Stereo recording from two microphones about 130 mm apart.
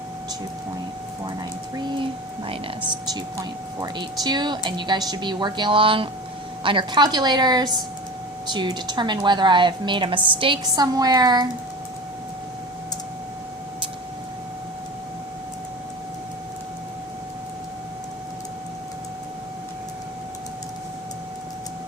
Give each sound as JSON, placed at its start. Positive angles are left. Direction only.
{"t": 3.1, "sound": "speech", "side_deg": -30}